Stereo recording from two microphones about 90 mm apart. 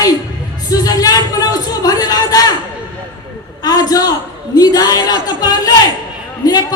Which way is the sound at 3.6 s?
45° left (ahead or behind).